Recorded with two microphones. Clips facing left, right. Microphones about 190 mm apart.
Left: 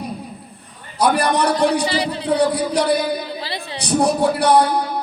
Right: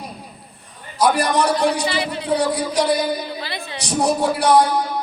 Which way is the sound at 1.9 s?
35° left (ahead or behind).